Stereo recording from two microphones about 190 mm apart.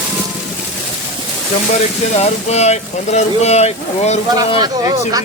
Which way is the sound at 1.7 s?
35° left (ahead or behind).